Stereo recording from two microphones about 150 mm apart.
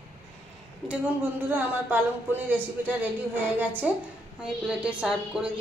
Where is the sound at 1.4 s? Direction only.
15° right (ahead or behind).